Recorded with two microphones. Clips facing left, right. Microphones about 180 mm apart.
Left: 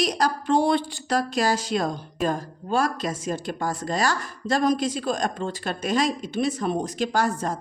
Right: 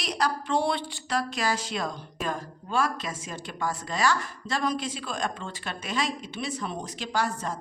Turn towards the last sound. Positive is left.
turn(degrees=45)  # may be behind; listen again after turning